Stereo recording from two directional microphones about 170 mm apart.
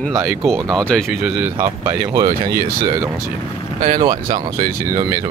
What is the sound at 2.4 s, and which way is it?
Speech, 60° right (ahead or behind).